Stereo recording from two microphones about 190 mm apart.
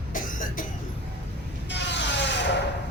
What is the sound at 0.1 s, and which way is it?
Cough, 45° left (ahead or behind).